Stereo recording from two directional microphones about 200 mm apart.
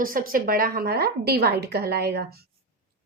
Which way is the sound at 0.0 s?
45° right (ahead or behind).